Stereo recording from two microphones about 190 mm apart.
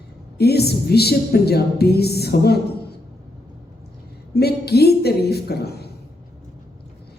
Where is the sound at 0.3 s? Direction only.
55° left (ahead or behind).